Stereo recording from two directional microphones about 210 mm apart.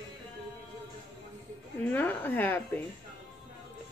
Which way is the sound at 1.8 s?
10° left (ahead or behind).